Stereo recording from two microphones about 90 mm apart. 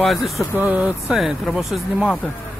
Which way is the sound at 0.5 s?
20° right (ahead or behind).